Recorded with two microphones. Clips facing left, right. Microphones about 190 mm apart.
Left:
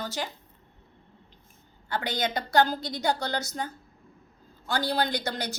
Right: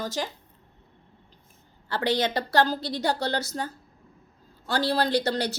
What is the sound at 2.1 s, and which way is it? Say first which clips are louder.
A woman's voice: right 5 dB; 35° right (ahead or behind).